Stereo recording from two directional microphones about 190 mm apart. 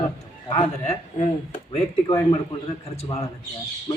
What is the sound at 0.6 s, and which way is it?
Speech, 35° left (ahead or behind).